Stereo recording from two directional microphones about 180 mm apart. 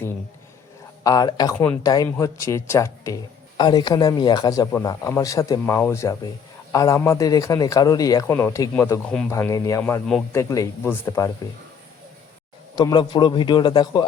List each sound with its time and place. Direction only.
1.0 s a man's voice: 20° left (ahead or behind)
1.5 s speech: 10° left (ahead or behind)
1.8 s a man's voice: 20° left (ahead or behind)
12.7 s a man's voice: 25° left (ahead or behind)